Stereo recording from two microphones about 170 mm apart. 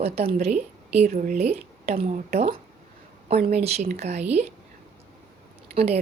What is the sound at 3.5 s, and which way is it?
Speech, 40° right (ahead or behind).